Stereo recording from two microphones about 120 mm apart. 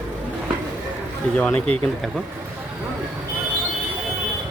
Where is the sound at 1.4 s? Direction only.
10° left (ahead or behind).